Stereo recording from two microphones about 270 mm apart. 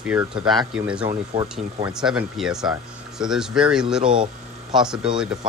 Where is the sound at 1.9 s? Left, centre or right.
Centre.